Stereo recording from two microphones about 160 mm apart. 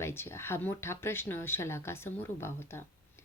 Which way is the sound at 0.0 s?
15° left (ahead or behind).